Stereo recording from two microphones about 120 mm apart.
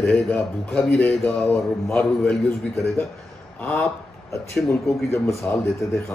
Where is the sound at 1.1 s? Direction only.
15° left (ahead or behind).